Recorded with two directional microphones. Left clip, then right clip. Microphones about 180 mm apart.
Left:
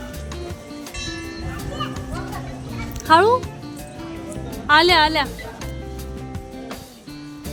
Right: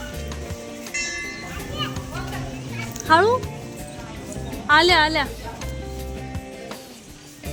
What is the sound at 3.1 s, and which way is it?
Speech, 20° left (ahead or behind).